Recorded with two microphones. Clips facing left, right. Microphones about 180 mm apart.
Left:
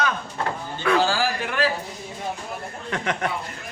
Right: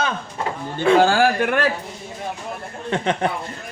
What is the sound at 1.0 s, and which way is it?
Speech, 55° right (ahead or behind).